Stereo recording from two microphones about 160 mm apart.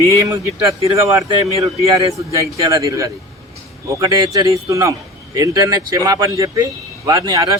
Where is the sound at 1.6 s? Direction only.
20° right (ahead or behind).